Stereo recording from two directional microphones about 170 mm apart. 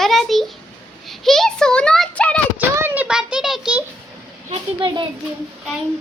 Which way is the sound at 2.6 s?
10° right (ahead or behind).